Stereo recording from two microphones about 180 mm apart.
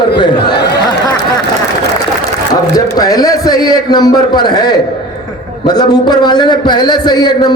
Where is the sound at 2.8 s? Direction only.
20° left (ahead or behind).